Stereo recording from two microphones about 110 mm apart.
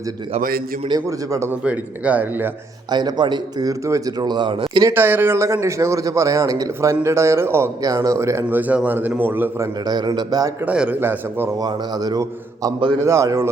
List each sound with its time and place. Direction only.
1.0 s a man's voice: 25° right (ahead or behind)
1.6 s speech: 15° right (ahead or behind)
2.9 s a man's voice: 40° right (ahead or behind)
4.9 s a man's voice: 20° right (ahead or behind)
9.8 s a man's voice: 40° right (ahead or behind)
10.7 s speech: 15° right (ahead or behind)
11.5 s a man's voice: 35° right (ahead or behind)